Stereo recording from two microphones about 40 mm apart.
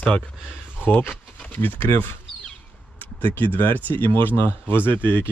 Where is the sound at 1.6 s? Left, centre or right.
Left.